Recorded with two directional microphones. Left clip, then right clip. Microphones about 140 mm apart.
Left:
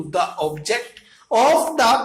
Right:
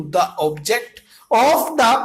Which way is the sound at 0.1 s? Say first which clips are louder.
Right 3 dB; 40° right (ahead or behind).